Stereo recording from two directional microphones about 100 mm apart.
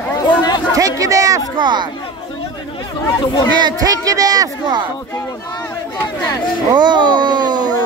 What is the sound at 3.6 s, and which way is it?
Speech, 40° right (ahead or behind).